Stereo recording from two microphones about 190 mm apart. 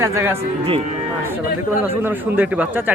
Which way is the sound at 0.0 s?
10° right (ahead or behind).